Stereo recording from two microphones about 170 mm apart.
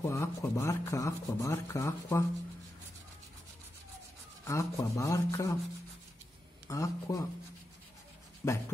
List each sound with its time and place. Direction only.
0.0 s speech: 15° left (ahead or behind)
4.5 s speech: 20° left (ahead or behind)
6.7 s speech: 20° left (ahead or behind)
8.4 s speech: 15° left (ahead or behind)